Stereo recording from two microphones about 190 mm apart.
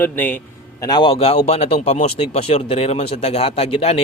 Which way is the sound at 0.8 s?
20° left (ahead or behind).